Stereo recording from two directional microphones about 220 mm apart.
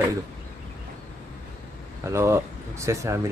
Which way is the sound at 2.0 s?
10° right (ahead or behind).